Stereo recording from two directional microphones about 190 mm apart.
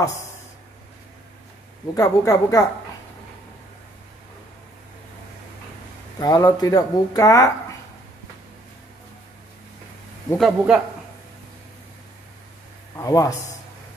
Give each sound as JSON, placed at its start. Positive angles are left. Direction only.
{"t": 2.0, "sound": "speech", "side_deg": 15}
{"t": 6.1, "sound": "speech", "side_deg": 20}
{"t": 10.3, "sound": "a man's voice", "side_deg": 0}
{"t": 12.9, "sound": "speech", "side_deg": 20}